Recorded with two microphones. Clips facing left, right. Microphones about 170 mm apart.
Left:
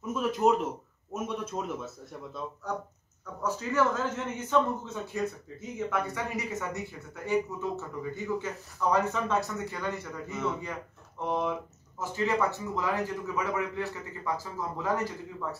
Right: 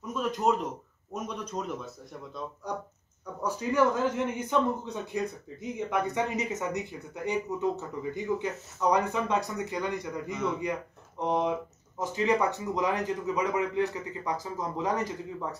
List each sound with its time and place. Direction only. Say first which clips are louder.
0.0 s a man's voice: left 2 dB; 5° left (ahead or behind)
3.4 s a man's voice: right 2 dB; 15° right (ahead or behind)